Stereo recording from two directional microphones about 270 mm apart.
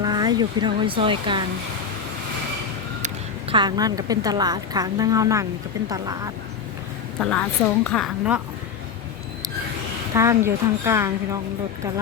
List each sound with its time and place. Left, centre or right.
0.0 s speech: centre
3.5 s a woman's voice: centre
7.2 s a woman's voice: centre
10.2 s a woman's voice: centre